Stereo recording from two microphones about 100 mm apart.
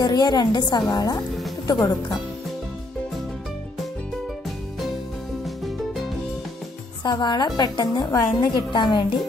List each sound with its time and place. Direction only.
0.0 s a woman's voice: 45° left (ahead or behind)
7.0 s a woman's voice: 45° left (ahead or behind)